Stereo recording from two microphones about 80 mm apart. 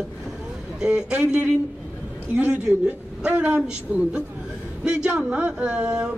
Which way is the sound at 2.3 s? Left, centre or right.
Centre.